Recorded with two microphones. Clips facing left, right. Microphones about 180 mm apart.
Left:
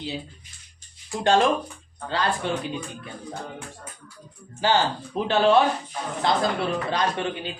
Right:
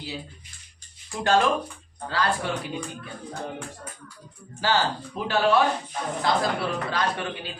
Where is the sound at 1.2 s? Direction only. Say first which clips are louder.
Left 2 dB; 20° left (ahead or behind).